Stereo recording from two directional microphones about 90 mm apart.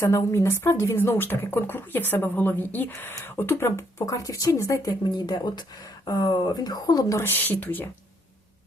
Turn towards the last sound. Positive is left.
turn(degrees=20)  # may be behind; listen again after turning